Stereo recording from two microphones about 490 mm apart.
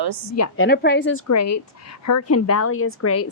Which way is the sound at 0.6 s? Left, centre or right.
Centre.